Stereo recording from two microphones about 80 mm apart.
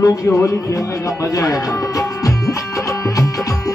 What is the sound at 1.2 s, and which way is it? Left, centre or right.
Music, left.